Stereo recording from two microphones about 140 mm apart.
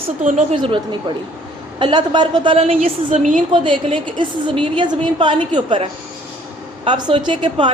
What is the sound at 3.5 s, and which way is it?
A woman's voice, 35° right (ahead or behind).